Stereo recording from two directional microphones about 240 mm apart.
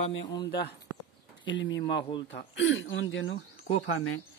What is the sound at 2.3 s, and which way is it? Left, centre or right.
Speech, left.